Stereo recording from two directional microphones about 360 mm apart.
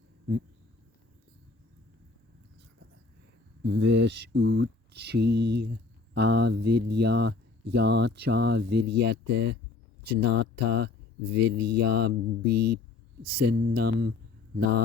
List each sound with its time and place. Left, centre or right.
3.6 s speech: right